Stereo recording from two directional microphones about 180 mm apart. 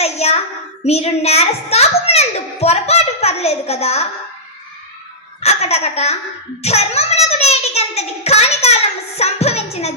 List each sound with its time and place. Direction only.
0.0 s child singing: 35° left (ahead or behind)
0.9 s a child's voice: 35° left (ahead or behind)
5.4 s a child's voice: 35° left (ahead or behind)